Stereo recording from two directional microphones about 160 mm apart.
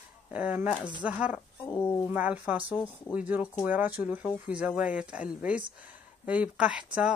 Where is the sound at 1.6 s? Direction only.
15° left (ahead or behind).